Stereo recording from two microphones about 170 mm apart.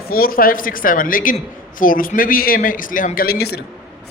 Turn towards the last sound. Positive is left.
turn(degrees=65)  # may be behind; listen again after turning